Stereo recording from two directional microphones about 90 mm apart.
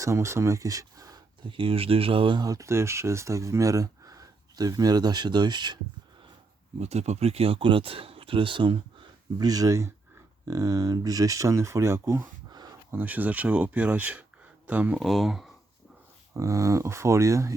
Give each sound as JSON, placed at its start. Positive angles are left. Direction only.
{"t": 0.0, "sound": "speech", "side_deg": -35}
{"t": 1.5, "sound": "speech", "side_deg": -80}
{"t": 2.4, "sound": "speech", "side_deg": -40}
{"t": 7.3, "sound": "speech", "side_deg": -90}
{"t": 9.4, "sound": "speech", "side_deg": -45}
{"t": 12.2, "sound": "a sound", "side_deg": -50}
{"t": 12.9, "sound": "speech", "side_deg": -20}
{"t": 14.9, "sound": "speech", "side_deg": 0}
{"t": 16.3, "sound": "speech", "side_deg": -35}